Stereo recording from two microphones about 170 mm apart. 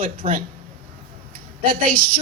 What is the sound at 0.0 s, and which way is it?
Speech, 55° right (ahead or behind).